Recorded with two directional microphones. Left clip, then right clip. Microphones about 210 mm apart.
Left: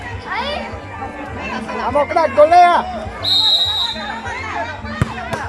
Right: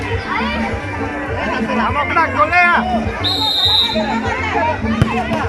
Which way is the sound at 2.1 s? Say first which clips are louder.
Left 4 dB; 35° left (ahead or behind).